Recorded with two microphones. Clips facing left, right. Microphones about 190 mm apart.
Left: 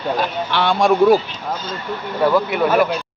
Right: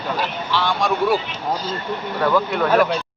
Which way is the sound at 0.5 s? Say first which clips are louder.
Left 5 dB; 60° left (ahead or behind).